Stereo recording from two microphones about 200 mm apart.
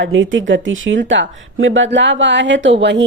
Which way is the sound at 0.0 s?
70° right (ahead or behind).